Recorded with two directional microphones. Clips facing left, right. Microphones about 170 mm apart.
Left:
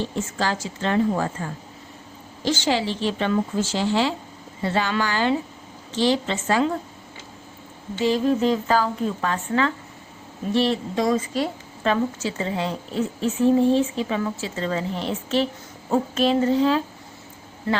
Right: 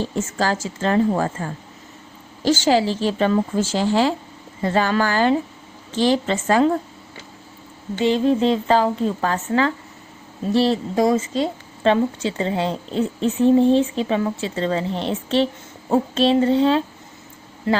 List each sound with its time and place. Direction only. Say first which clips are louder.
0.0 s a woman's voice: right 3 dB; 45° right (ahead or behind)
2.6 s a woman's voice: right 5 dB; 40° right (ahead or behind)
8.0 s speech: right 3 dB; 25° right (ahead or behind)